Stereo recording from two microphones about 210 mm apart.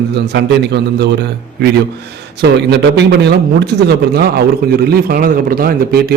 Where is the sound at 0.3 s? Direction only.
50° right (ahead or behind).